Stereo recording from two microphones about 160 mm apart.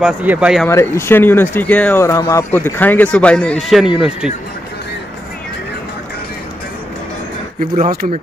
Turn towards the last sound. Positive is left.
turn(degrees=-50)  # may be behind; listen again after turning